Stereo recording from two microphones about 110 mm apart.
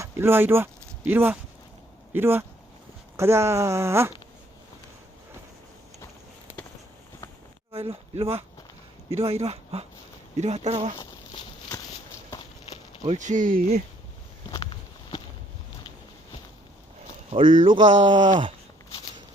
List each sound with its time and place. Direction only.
0.0 s speech: 20° right (ahead or behind)
7.7 s speech: 60° right (ahead or behind)
10.3 s speech: 90° right
10.9 s a sound: 40° left (ahead or behind)
13.3 s speech: 90° right
14.5 s a sound: 45° left (ahead or behind)
17.3 s speech: 45° right (ahead or behind)